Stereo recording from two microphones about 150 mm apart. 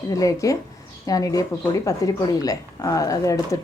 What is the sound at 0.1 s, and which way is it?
Speech, 20° left (ahead or behind).